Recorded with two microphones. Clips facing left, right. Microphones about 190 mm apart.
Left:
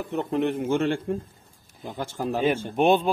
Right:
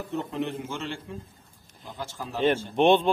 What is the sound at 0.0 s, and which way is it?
A man's voice, 65° left (ahead or behind).